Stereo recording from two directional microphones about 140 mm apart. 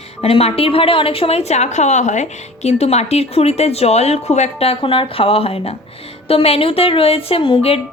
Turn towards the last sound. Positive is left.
turn(degrees=40)  # may be behind; listen again after turning